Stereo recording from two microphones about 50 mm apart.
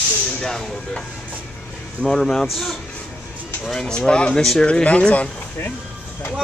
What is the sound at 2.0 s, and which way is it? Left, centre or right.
Speech, centre.